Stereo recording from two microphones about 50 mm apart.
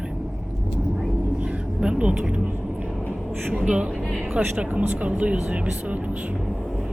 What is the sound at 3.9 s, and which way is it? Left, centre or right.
Speech, centre.